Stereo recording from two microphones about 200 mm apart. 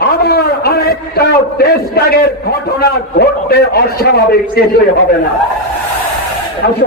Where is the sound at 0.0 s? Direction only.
50° left (ahead or behind).